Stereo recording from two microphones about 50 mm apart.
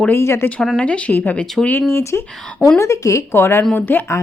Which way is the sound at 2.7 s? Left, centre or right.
Left.